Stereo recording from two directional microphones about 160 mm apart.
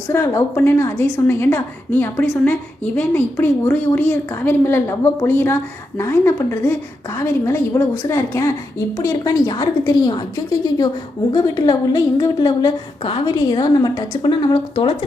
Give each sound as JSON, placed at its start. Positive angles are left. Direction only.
{"t": 0.1, "sound": "a woman's voice", "side_deg": 15}